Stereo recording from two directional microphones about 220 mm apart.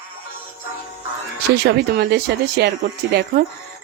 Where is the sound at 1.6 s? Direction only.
45° right (ahead or behind).